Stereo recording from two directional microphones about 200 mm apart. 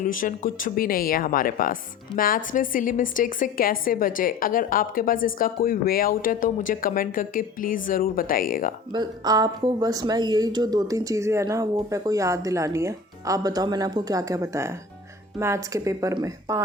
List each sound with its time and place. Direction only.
0.0 s speech: 40° left (ahead or behind)
8.9 s a woman's voice: 20° right (ahead or behind)